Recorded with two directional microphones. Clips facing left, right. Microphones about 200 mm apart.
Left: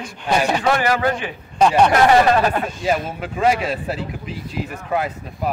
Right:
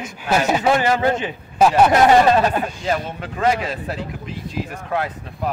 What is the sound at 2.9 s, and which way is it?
A man's voice, 10° left (ahead or behind).